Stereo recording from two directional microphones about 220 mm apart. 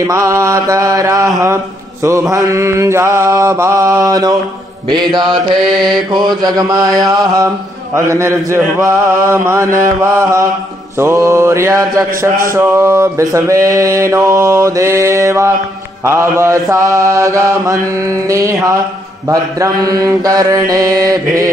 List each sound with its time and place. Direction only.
0.0 s mantra: 15° right (ahead or behind)
2.3 s mantra: 15° right (ahead or behind)
5.6 s mantra: centre (ahead or behind)
6.1 s mantra: 20° right (ahead or behind)